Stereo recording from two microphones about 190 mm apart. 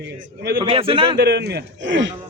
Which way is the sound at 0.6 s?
30° right (ahead or behind).